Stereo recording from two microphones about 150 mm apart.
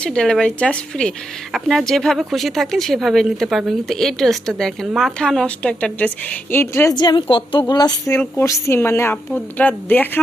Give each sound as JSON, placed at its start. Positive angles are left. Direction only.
{"t": 0.0, "sound": "a woman's voice", "side_deg": 5}
{"t": 6.9, "sound": "a woman's voice", "side_deg": 30}